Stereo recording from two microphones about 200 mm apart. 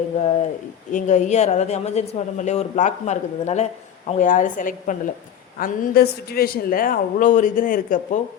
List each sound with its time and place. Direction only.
0.9 s a woman's voice: 35° left (ahead or behind)